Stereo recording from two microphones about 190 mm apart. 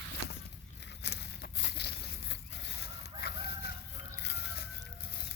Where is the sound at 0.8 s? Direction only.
65° left (ahead or behind).